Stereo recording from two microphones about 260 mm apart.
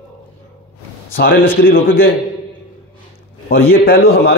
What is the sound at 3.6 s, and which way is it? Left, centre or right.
Speech, left.